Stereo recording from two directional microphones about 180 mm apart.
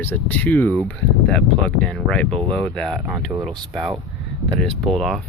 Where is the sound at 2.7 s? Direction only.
5° left (ahead or behind).